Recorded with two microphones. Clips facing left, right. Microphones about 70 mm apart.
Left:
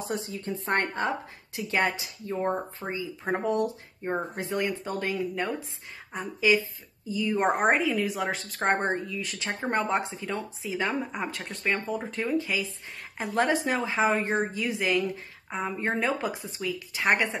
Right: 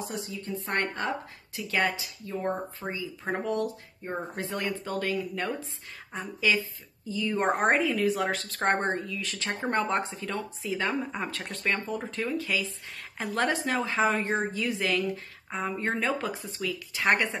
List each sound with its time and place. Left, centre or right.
0.0 s a woman's voice: left; by 12.4 s centre
12.4 s a woman's voice: centre